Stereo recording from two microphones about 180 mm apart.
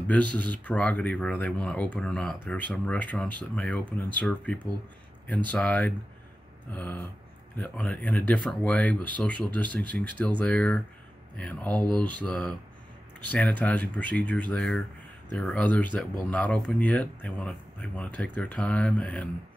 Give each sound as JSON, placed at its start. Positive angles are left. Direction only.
{"t": 0.1, "sound": "speech", "side_deg": 10}